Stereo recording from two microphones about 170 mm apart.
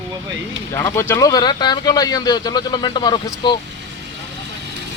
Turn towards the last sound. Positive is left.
turn(degrees=25)  # may be behind; listen again after turning